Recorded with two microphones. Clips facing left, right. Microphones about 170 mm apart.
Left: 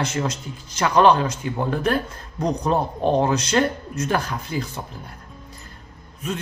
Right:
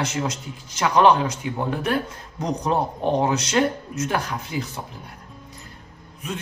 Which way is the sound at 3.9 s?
Centre (ahead or behind).